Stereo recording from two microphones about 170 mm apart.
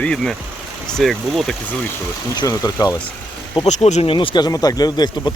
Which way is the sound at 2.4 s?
25° left (ahead or behind).